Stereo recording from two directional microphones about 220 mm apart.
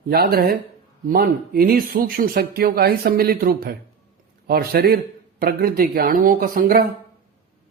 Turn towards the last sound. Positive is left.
turn(degrees=-40)  # may be behind; listen again after turning